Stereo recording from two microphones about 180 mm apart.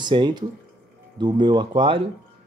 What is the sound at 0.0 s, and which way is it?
Speech, 25° right (ahead or behind).